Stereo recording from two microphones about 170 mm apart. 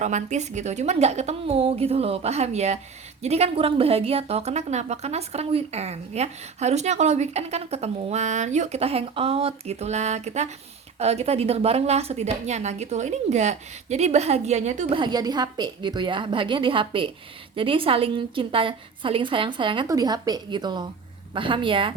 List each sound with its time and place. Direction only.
0.0 s a woman's voice: 45° right (ahead or behind)
14.9 s a woman's voice: 25° right (ahead or behind)